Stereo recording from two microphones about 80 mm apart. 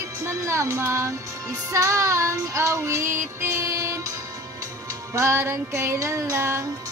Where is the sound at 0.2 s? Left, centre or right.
Right.